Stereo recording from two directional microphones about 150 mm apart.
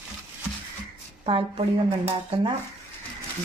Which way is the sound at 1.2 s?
40° right (ahead or behind).